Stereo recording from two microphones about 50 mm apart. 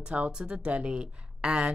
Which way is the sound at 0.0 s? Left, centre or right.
Right.